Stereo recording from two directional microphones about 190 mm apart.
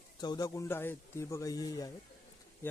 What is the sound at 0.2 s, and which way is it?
Speech, 20° left (ahead or behind).